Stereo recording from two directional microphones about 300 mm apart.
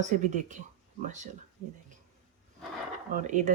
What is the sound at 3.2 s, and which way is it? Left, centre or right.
Speech, right.